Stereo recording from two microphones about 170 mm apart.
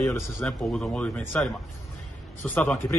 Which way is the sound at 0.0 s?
15° left (ahead or behind).